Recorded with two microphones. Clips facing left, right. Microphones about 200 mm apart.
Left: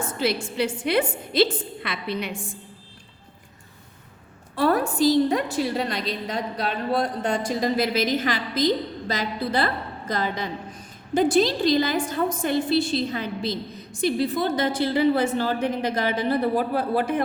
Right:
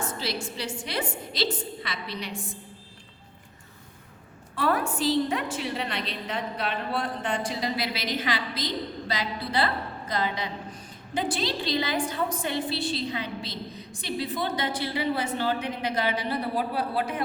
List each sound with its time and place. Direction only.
0.0 s a woman's voice: 55° left (ahead or behind)
4.5 s a woman's voice: 35° left (ahead or behind)